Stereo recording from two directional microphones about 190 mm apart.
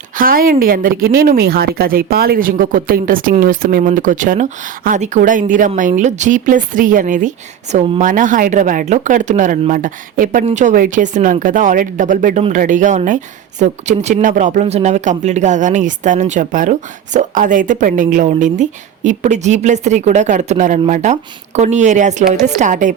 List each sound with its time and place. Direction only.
0.2 s speech: 50° right (ahead or behind)